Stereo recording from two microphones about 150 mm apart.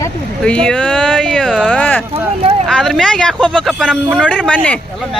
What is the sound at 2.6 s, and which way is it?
Speech, 5° left (ahead or behind).